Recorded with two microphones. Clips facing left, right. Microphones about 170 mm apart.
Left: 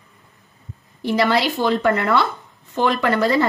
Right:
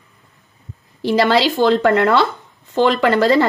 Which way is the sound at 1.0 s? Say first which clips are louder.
Right 4 dB; 85° right.